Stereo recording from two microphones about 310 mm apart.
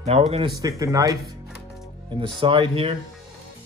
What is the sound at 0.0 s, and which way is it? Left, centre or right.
Speech, centre.